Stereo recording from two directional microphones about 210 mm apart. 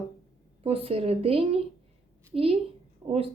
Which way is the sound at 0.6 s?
25° right (ahead or behind).